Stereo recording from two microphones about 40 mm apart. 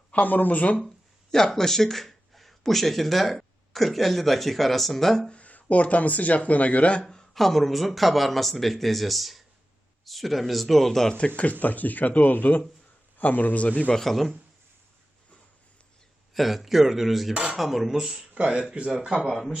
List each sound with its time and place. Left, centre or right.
0.2 s speech: left
0.8 s speech: centre
5.3 s speech: left
7.3 s speech: centre
11.6 s speech: left
13.9 s speech: centre
16.3 s speech: centre
18.3 s speech: right
18.9 s speech: centre
19.3 s speech: centre